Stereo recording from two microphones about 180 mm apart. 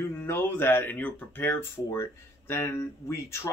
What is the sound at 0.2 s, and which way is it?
Speech, 10° left (ahead or behind).